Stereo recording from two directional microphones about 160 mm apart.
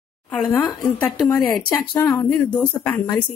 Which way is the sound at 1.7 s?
20° left (ahead or behind).